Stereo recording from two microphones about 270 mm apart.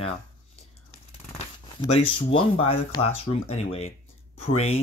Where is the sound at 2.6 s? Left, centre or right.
Centre.